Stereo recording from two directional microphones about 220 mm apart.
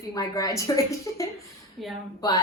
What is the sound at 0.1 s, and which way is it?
A woman's voice, 15° left (ahead or behind).